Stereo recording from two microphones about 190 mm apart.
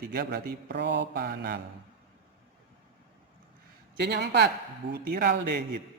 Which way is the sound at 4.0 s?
65° right (ahead or behind).